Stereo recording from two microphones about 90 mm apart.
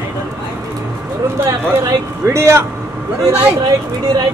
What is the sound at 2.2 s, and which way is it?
Speech, 30° right (ahead or behind).